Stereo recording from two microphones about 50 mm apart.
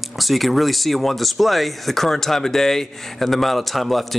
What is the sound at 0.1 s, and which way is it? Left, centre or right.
Speech, centre.